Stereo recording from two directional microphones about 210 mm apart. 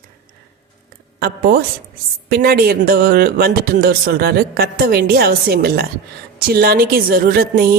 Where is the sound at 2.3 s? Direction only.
45° right (ahead or behind).